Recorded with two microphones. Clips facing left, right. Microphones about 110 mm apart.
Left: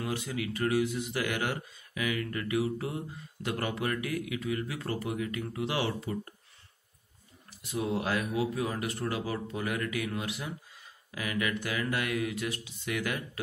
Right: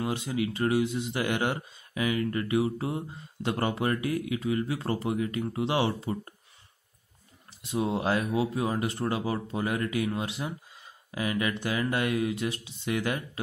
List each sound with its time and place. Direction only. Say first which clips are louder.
0.0 s speech: right 4 dB; 20° right (ahead or behind)
7.6 s speech: right 3 dB; 25° right (ahead or behind)